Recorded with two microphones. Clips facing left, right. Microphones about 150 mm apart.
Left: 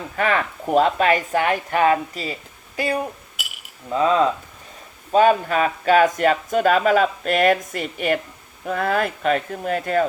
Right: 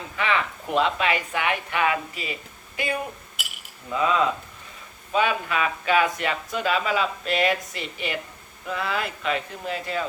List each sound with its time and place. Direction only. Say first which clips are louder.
0.2 s speech: left 4 dB; 45° left (ahead or behind)